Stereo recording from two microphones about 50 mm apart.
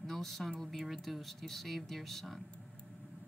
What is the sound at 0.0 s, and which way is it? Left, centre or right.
Speech, centre.